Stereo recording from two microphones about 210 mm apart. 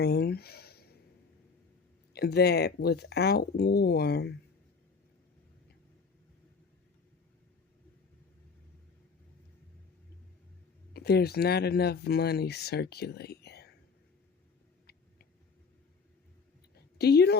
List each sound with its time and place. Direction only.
0.0 s a sound: 50° left (ahead or behind)
2.1 s speech: 50° left (ahead or behind)
10.9 s speech: 50° left (ahead or behind)
17.0 s speech: 50° left (ahead or behind)